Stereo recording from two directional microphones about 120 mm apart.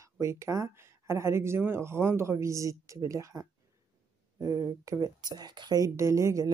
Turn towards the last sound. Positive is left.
turn(degrees=-25)  # may be behind; listen again after turning